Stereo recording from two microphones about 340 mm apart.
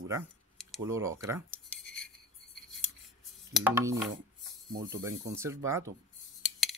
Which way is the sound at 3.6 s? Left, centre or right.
Centre.